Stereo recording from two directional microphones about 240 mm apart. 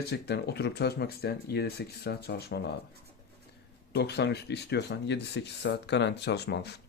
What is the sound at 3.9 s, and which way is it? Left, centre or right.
Speech, left.